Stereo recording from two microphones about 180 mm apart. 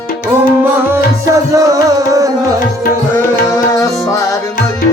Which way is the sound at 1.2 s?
15° right (ahead or behind).